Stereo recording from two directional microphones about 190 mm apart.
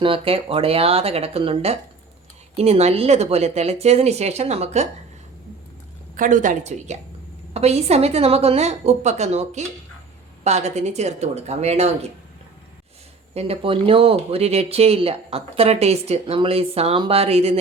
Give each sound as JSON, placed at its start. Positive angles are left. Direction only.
{"t": 0.0, "sound": "speech", "side_deg": -30}
{"t": 6.1, "sound": "speech", "side_deg": -45}
{"t": 13.3, "sound": "speech", "side_deg": -30}